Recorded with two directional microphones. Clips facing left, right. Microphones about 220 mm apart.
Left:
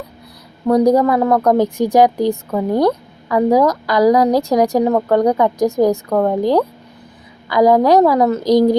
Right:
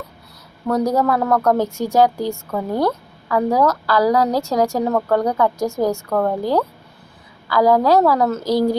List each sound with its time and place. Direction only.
0.7 s a woman's voice: 15° left (ahead or behind)